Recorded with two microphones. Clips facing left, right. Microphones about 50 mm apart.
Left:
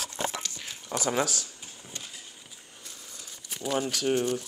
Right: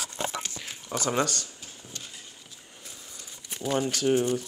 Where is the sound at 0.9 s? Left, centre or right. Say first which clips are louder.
Right 1 dB; centre.